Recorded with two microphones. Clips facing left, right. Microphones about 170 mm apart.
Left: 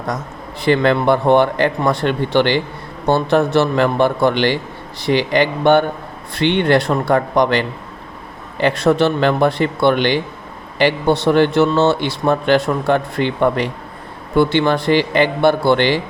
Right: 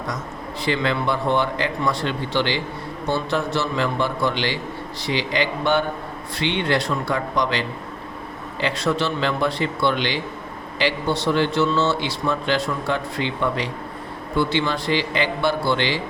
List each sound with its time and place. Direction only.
0.6 s a man's voice: 60° left (ahead or behind)